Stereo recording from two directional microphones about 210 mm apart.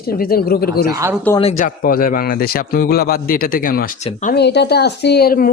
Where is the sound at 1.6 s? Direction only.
40° left (ahead or behind).